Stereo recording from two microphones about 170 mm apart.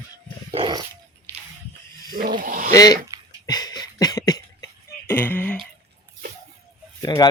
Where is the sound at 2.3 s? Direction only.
55° right (ahead or behind).